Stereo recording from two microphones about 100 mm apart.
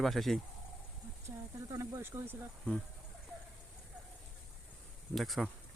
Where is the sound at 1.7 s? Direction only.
35° right (ahead or behind).